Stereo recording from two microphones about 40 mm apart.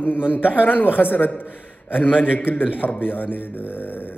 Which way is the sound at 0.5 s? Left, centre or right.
Left.